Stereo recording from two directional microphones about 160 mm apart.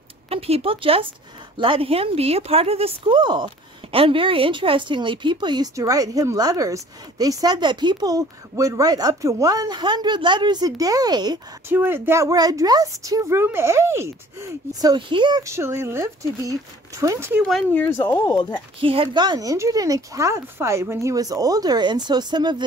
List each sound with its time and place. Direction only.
0.3 s speech: 40° right (ahead or behind)
11.7 s speech: 15° right (ahead or behind)
17.7 s speech: 10° left (ahead or behind)
18.2 s speech: 25° left (ahead or behind)
18.8 s speech: 35° right (ahead or behind)